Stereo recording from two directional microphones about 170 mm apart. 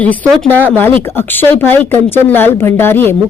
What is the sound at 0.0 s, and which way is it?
Speech, 10° left (ahead or behind).